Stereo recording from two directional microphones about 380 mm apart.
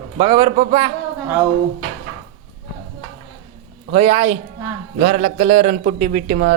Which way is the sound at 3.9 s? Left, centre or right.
Centre.